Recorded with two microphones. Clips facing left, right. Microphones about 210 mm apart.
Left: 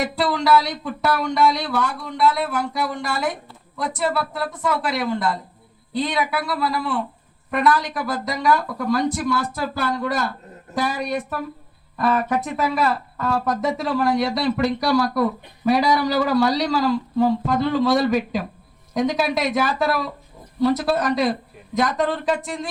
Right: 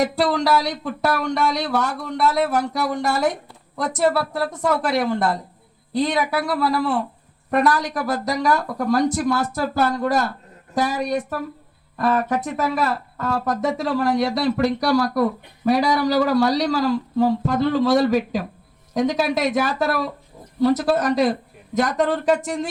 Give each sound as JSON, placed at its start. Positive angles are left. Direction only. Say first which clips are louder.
{"t": 0.0, "sound": "speech", "louder": "right 2 dB", "side_deg": -45}